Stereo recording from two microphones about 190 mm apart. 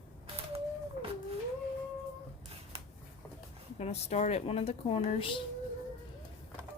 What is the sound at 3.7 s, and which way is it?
Speech, 35° left (ahead or behind).